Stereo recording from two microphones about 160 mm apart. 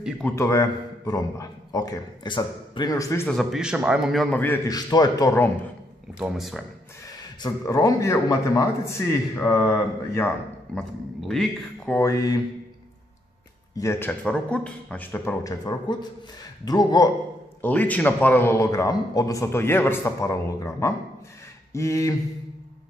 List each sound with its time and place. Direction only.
0.2 s a man's voice: 20° left (ahead or behind)
3.3 s a man's voice: centre (ahead or behind)
4.6 s a man's voice: 25° left (ahead or behind)
6.1 s a man's voice: centre (ahead or behind)
7.4 s a man's voice: 20° left (ahead or behind); by 12.0 s 5° left (ahead or behind)
12.0 s a man's voice: 20° left (ahead or behind)
13.7 s a man's voice: 15° left (ahead or behind)
17.6 s a man's voice: 10° left (ahead or behind)